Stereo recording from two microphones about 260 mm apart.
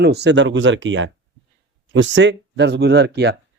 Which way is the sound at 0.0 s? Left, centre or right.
Right.